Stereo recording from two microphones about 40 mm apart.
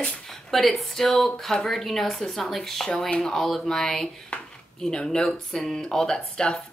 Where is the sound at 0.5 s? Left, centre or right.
Centre.